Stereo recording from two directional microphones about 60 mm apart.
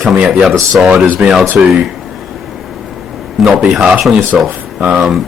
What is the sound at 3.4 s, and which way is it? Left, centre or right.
Speech, centre.